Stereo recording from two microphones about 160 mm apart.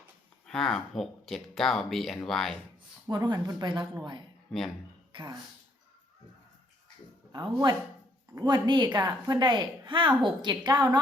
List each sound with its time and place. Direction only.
0.4 s speech: 5° left (ahead or behind)
3.1 s a woman's voice: 25° right (ahead or behind)
4.5 s speech: centre (ahead or behind)
5.1 s speech: 25° right (ahead or behind)
7.3 s a woman's voice: 25° right (ahead or behind)